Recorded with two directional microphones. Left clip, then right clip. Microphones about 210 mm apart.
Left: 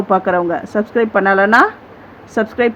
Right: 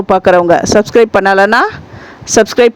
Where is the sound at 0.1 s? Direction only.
50° right (ahead or behind).